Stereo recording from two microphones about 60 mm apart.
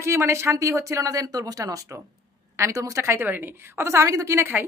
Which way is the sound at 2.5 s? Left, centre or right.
Right.